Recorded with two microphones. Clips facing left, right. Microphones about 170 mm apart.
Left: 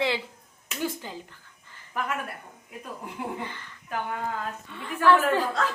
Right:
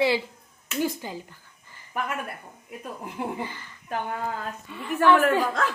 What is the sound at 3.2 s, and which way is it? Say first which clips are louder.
Speech: right 3 dB; 30° right (ahead or behind).